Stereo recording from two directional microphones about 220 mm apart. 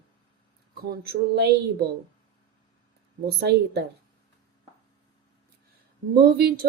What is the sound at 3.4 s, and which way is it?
Speech, 50° right (ahead or behind).